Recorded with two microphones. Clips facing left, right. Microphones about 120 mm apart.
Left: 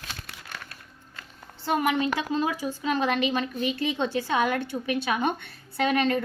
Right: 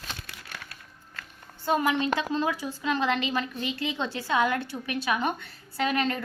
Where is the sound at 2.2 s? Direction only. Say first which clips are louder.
Left 1 dB; 20° left (ahead or behind).